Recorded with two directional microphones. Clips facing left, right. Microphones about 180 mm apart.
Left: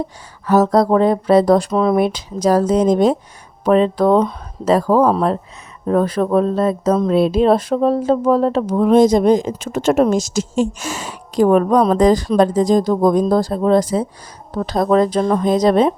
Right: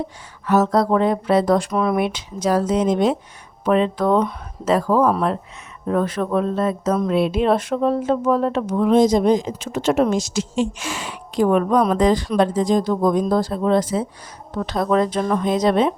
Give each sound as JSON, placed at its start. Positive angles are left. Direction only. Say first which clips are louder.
{"t": 0.4, "sound": "speech", "louder": "left 4 dB", "side_deg": 35}